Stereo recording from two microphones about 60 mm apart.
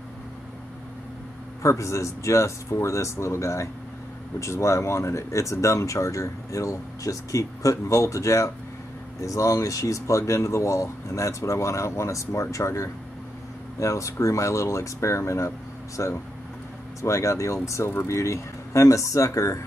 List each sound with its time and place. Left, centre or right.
1.6 s speech: left